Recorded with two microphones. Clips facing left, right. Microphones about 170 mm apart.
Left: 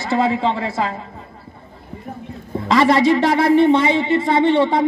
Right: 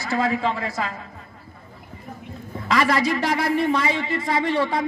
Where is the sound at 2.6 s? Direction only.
25° left (ahead or behind).